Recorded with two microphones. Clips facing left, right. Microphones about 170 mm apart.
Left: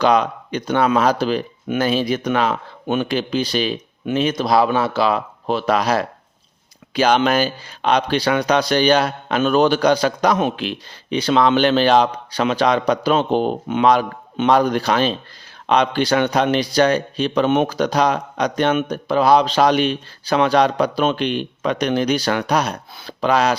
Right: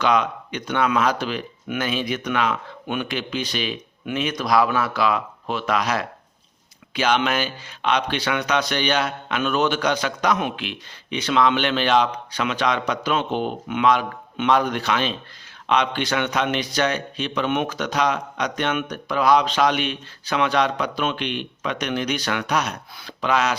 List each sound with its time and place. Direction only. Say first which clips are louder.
0.0 s speech: left 4 dB; 35° left (ahead or behind)